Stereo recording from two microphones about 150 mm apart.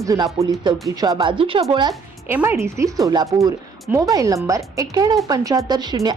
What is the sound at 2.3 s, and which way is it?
Speech, 15° right (ahead or behind).